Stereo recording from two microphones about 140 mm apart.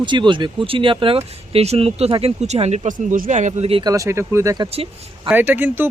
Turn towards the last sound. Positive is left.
turn(degrees=-15)  # may be behind; listen again after turning